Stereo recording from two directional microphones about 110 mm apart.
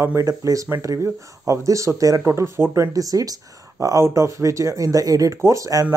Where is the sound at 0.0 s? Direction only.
25° right (ahead or behind).